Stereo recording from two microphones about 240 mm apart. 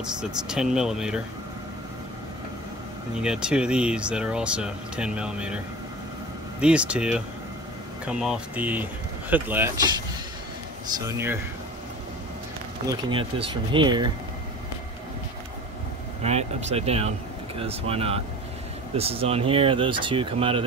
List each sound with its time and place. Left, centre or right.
0.0 s speech: centre
3.2 s speech: centre
6.6 s speech: centre
11.1 s speech: centre
12.8 s speech: centre
16.2 s speech: right